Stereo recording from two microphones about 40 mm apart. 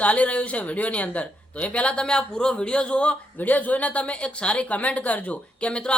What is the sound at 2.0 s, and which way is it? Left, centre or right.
A man's voice, left.